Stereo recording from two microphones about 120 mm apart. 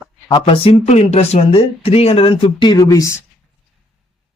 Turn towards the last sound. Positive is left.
turn(degrees=25)  # may be behind; listen again after turning